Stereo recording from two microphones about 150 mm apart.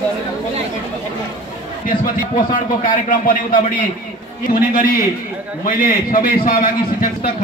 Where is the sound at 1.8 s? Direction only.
65° left (ahead or behind).